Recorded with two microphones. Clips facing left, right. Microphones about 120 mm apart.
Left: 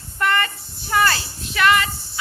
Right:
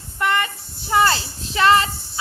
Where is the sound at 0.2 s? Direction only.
15° right (ahead or behind).